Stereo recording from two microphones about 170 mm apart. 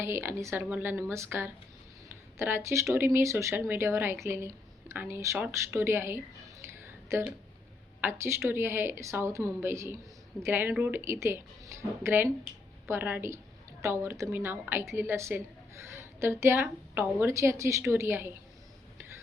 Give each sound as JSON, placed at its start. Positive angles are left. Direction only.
{"t": 0.0, "sound": "a woman's voice", "side_deg": -15}